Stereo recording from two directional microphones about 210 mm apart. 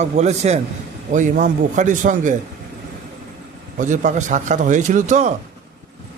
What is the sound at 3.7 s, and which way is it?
A man's voice, 35° right (ahead or behind).